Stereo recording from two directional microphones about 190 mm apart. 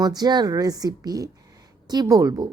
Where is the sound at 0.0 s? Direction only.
20° right (ahead or behind).